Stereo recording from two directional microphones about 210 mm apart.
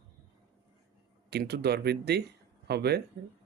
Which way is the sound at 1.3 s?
50° right (ahead or behind).